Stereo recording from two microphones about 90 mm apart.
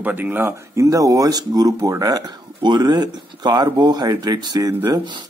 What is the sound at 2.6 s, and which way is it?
Speech, 55° right (ahead or behind).